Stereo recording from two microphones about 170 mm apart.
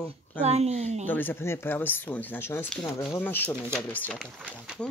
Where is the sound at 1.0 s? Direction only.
10° left (ahead or behind).